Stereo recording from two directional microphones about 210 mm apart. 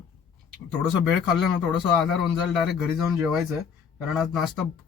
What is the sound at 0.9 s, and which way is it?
A man's voice, centre (ahead or behind).